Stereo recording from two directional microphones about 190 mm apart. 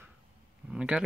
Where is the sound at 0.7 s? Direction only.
5° right (ahead or behind).